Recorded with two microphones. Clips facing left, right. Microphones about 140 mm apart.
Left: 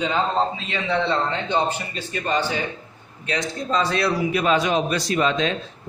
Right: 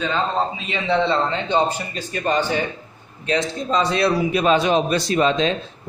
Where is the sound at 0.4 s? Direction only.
15° right (ahead or behind).